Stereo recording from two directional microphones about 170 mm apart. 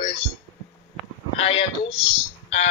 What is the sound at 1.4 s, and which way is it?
Speech, 35° left (ahead or behind).